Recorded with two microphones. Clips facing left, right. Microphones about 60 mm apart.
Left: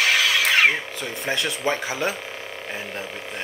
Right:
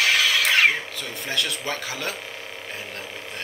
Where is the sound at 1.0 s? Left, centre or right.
Left.